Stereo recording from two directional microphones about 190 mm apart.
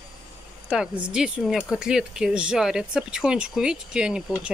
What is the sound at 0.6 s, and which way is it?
Speech, 5° right (ahead or behind).